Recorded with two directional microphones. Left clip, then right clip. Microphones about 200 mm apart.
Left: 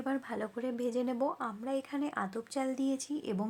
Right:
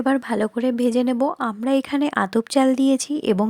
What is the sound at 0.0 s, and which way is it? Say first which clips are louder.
A woman's voice: right 15 dB; 40° right (ahead or behind).